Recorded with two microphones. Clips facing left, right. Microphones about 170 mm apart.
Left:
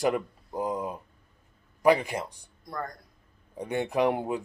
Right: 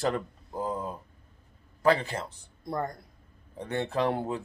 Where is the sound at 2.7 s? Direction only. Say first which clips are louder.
Right 4 dB; 25° right (ahead or behind).